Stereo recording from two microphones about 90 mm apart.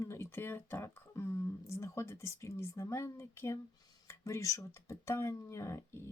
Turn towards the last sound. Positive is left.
turn(degrees=30)  # may be behind; listen again after turning